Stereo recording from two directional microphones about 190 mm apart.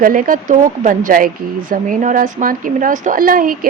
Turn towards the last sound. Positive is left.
turn(degrees=-50)  # may be behind; listen again after turning